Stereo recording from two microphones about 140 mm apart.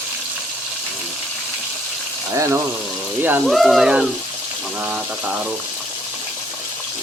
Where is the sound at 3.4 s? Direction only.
Centre (ahead or behind).